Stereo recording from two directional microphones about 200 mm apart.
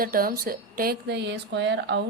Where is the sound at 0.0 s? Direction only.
45° right (ahead or behind).